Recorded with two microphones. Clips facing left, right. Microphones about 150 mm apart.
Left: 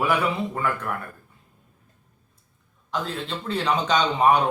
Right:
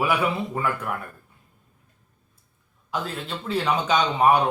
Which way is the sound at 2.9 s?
5° right (ahead or behind).